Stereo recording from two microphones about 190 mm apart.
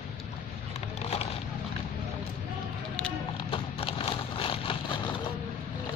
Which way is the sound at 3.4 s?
30° left (ahead or behind).